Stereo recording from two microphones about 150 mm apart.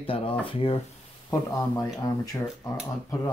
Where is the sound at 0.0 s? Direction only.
35° left (ahead or behind).